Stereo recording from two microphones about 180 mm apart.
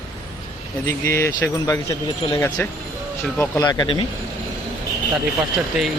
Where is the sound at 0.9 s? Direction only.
15° left (ahead or behind).